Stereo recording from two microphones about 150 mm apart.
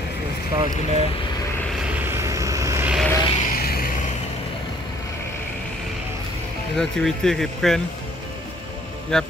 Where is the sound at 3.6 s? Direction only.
90° left.